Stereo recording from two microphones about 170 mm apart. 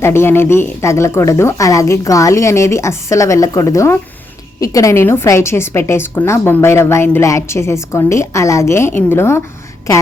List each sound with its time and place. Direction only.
0.0 s a woman's voice: 15° left (ahead or behind)